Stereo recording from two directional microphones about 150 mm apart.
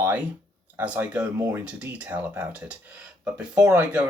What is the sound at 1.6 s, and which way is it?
Speech, 10° right (ahead or behind).